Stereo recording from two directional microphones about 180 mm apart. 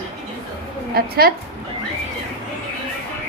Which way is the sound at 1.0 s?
55° right (ahead or behind).